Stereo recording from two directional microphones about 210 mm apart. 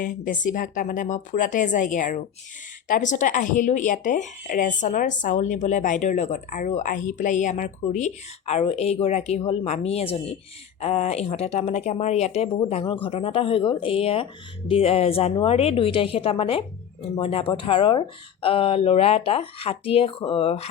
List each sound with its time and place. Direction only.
0.0 s speech: 40° left (ahead or behind)